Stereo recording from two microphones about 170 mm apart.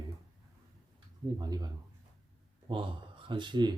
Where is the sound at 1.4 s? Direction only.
25° right (ahead or behind).